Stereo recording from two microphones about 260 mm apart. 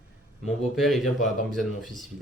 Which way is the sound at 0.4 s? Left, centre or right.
Centre.